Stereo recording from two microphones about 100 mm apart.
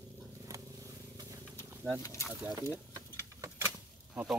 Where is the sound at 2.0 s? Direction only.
30° left (ahead or behind).